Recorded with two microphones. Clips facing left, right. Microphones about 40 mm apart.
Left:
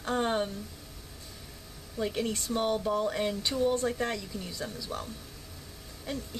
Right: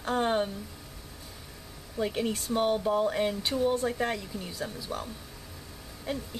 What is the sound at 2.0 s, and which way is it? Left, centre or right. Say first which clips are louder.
A woman's voice: right 2 dB; centre.